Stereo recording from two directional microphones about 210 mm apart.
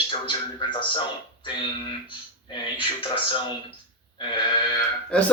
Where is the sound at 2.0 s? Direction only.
25° left (ahead or behind).